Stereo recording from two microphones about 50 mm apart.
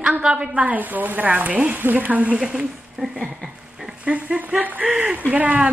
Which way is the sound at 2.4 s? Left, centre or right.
Centre.